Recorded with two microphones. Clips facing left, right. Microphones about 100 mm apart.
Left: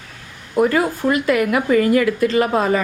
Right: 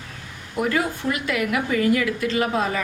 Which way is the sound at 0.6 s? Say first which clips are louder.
Left 4 dB; 45° left (ahead or behind).